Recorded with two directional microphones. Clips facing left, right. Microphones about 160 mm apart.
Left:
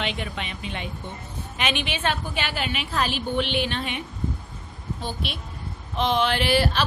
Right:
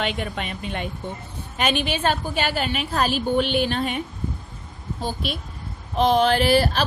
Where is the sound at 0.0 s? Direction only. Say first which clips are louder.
Right 3 dB; 45° right (ahead or behind).